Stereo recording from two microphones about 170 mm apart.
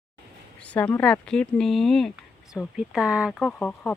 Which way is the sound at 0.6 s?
10° left (ahead or behind).